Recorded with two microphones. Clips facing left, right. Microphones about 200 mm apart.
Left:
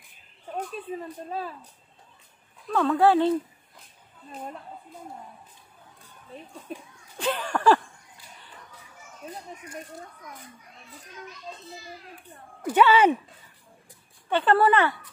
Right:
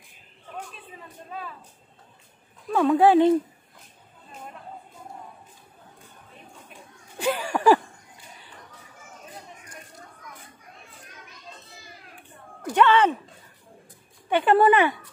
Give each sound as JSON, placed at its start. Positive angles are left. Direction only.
{"t": 0.6, "sound": "speech", "side_deg": 40}
{"t": 2.7, "sound": "speech", "side_deg": -15}
{"t": 7.2, "sound": "a sound", "side_deg": -10}
{"t": 12.6, "sound": "speech", "side_deg": 10}
{"t": 14.3, "sound": "speech", "side_deg": -15}